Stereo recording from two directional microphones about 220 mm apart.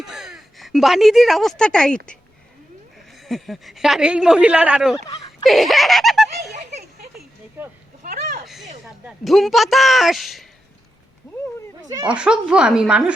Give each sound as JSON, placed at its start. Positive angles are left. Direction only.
{"t": 0.0, "sound": "a woman's voice", "side_deg": 0}
{"t": 3.1, "sound": "speech", "side_deg": 0}
{"t": 7.6, "sound": "speech", "side_deg": -10}
{"t": 8.0, "sound": "a sound", "side_deg": -40}
{"t": 8.4, "sound": "a sound", "side_deg": 0}
{"t": 8.8, "sound": "speech", "side_deg": 0}
{"t": 11.9, "sound": "speech", "side_deg": -15}
{"t": 12.1, "sound": "speech", "side_deg": -5}